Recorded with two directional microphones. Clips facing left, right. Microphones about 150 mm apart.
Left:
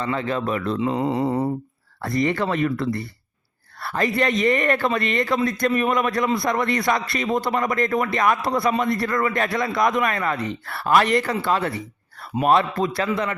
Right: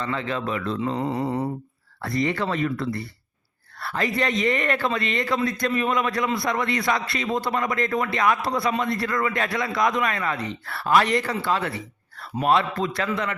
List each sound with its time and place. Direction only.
0.1 s a man's voice: 40° left (ahead or behind)
0.9 s mantra: 20° left (ahead or behind)
2.2 s a man's voice: 50° left (ahead or behind); by 13.3 s 30° left (ahead or behind)